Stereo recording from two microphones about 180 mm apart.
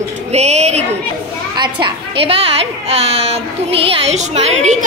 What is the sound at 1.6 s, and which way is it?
A woman's voice, 25° right (ahead or behind).